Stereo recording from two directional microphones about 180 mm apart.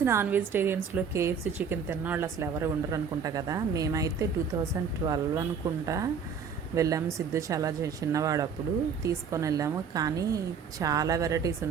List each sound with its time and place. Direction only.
0.0 s a woman's voice: 15° right (ahead or behind)